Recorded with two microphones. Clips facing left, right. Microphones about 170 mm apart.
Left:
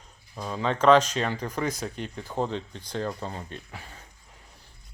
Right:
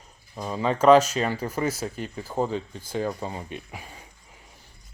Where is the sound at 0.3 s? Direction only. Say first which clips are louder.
Right 2 dB; 10° right (ahead or behind).